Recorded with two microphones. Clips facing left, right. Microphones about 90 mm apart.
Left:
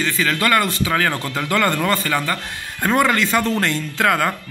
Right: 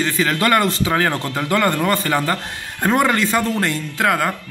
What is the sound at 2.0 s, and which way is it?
A man's voice, 25° right (ahead or behind).